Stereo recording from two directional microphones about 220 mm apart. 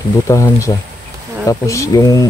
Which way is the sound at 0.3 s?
15° left (ahead or behind).